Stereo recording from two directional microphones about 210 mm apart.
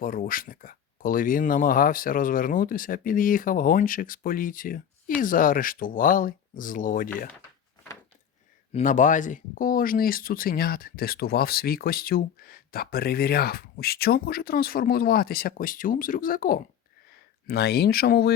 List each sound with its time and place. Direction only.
0.0 s speech: 40° left (ahead or behind)
8.7 s speech: 40° left (ahead or behind)